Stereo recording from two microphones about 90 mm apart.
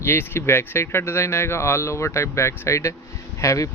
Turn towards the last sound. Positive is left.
turn(degrees=35)  # may be behind; listen again after turning